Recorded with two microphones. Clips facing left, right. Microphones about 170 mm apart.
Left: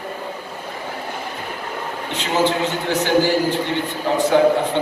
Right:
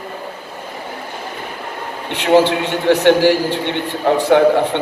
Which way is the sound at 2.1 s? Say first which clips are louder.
Right 7 dB; 65° right (ahead or behind).